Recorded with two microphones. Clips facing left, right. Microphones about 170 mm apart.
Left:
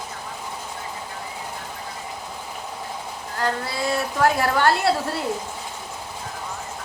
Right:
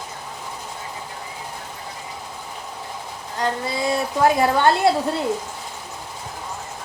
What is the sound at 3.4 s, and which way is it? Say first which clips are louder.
A woman's voice: right 2 dB; 20° right (ahead or behind).